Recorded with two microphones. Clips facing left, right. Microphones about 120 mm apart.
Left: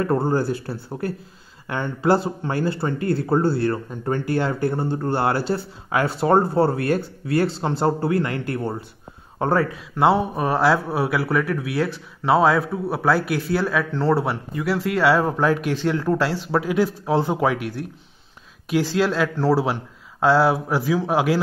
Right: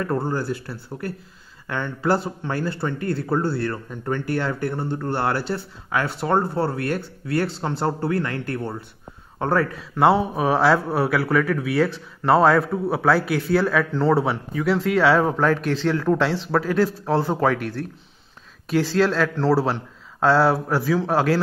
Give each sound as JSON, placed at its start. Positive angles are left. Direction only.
{"t": 0.0, "sound": "speech", "side_deg": 20}
{"t": 1.7, "sound": "speech", "side_deg": 15}
{"t": 6.0, "sound": "speech", "side_deg": 35}
{"t": 6.3, "sound": "speech", "side_deg": 20}
{"t": 9.9, "sound": "speech", "side_deg": 0}